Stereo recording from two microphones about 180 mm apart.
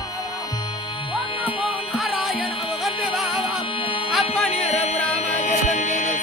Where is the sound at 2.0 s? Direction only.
Centre (ahead or behind).